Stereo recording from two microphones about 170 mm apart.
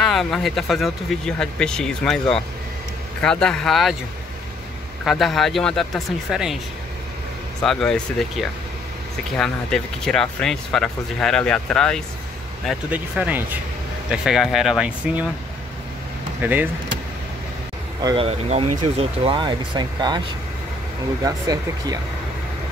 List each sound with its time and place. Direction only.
0.0 s speech: centre (ahead or behind)
5.0 s speech: centre (ahead or behind)
7.6 s speech: 5° left (ahead or behind)
12.9 s speech: 10° right (ahead or behind)
16.3 s speech: 10° right (ahead or behind)
18.0 s speech: 35° right (ahead or behind)
21.2 s speech: 20° right (ahead or behind)